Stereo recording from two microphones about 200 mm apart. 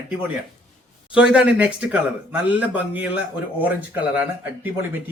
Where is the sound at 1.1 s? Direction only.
5° right (ahead or behind).